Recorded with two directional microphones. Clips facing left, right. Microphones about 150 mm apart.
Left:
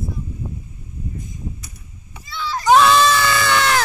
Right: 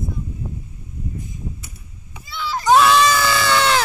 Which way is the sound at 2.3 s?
5° right (ahead or behind).